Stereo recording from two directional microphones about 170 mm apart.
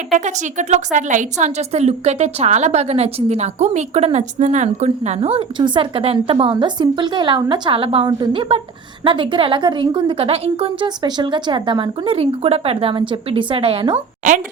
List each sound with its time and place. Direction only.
0.1 s a woman's voice: 45° right (ahead or behind); by 14.0 s 30° right (ahead or behind)